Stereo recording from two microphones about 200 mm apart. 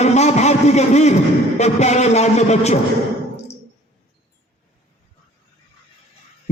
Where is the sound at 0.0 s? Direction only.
35° left (ahead or behind).